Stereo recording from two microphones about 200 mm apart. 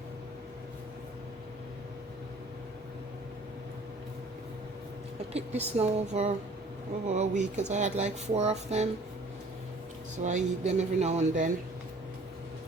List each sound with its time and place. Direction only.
5.3 s speech: 30° right (ahead or behind)
10.2 s speech: 35° right (ahead or behind)